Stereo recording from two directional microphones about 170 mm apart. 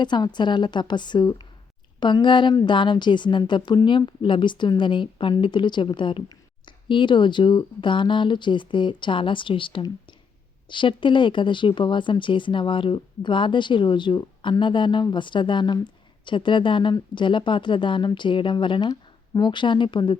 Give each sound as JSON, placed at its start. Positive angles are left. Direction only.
{"t": 0.0, "sound": "speech", "side_deg": 25}